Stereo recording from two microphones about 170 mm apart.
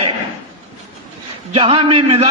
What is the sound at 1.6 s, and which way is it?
Speech, 35° right (ahead or behind).